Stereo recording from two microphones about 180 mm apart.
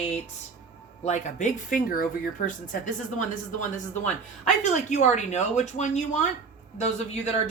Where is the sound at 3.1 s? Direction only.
45° left (ahead or behind).